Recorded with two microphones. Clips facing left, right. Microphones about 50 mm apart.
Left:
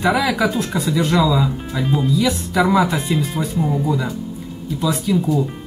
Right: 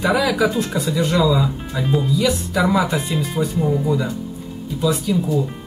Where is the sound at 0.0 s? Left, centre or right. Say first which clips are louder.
Left 1 dB; centre.